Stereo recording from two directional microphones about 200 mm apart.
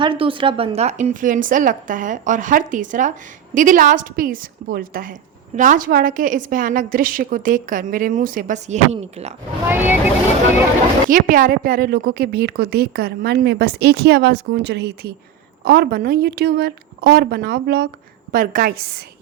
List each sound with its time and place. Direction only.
0.0 s a woman's voice: 25° right (ahead or behind)
9.6 s speech: 10° right (ahead or behind)
11.1 s a woman's voice: 45° right (ahead or behind)